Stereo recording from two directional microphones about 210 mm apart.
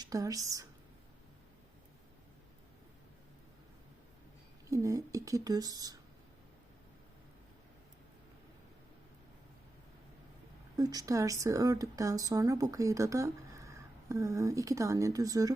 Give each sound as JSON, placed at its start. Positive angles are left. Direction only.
{"t": 0.0, "sound": "speech", "side_deg": -15}
{"t": 4.7, "sound": "speech", "side_deg": -15}
{"t": 10.8, "sound": "speech", "side_deg": -15}